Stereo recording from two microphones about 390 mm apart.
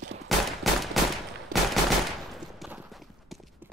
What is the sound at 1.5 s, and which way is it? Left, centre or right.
Machine gun, right.